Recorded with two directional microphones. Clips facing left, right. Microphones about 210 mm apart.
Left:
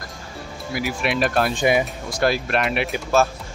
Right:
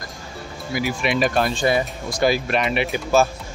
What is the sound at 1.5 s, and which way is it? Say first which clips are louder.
Speech: left 1 dB; 15° left (ahead or behind).